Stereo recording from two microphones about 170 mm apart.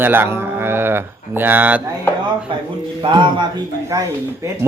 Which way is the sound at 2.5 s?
30° right (ahead or behind).